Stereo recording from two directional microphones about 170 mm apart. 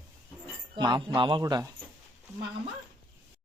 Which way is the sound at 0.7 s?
25° right (ahead or behind).